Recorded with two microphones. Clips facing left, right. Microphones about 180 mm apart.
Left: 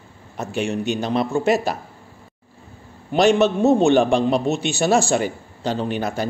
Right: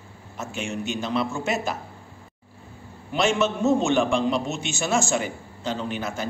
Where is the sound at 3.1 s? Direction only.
35° left (ahead or behind).